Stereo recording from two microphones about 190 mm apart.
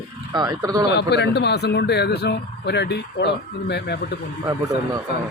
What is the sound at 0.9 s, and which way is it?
Speech, 65° left (ahead or behind).